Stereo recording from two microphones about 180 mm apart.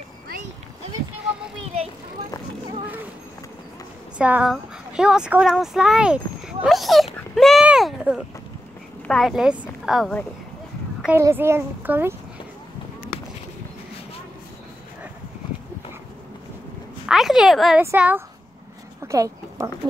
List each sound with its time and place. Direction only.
4.2 s speech: 5° right (ahead or behind)
7.3 s a sound: centre (ahead or behind)
9.0 s speech: centre (ahead or behind)
11.0 s speech: 10° right (ahead or behind)
17.0 s a sound: centre (ahead or behind)
17.8 s speech: 10° right (ahead or behind)